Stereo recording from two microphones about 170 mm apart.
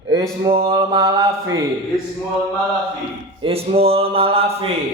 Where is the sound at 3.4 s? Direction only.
35° right (ahead or behind).